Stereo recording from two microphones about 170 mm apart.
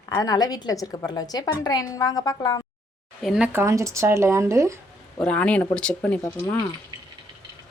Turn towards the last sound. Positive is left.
turn(degrees=15)  # may be behind; listen again after turning